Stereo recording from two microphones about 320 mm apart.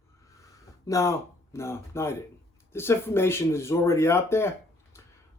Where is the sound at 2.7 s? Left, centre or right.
Centre.